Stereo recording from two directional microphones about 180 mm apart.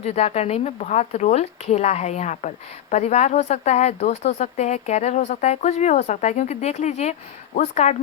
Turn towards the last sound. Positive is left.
turn(degrees=40)  # may be behind; listen again after turning